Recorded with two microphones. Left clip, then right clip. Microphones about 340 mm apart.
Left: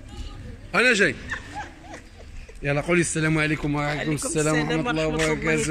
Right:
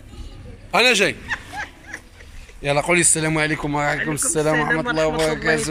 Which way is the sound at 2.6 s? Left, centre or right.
Centre.